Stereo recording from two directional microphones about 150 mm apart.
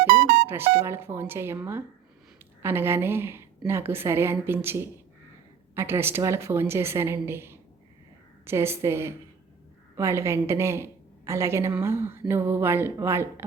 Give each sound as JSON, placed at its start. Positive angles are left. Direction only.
{"t": 0.0, "sound": "music", "side_deg": -90}
{"t": 0.4, "sound": "a woman's voice", "side_deg": -15}